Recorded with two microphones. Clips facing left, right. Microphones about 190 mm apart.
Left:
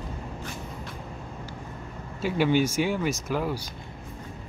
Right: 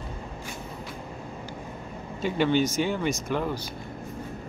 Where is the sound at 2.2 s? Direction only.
10° left (ahead or behind).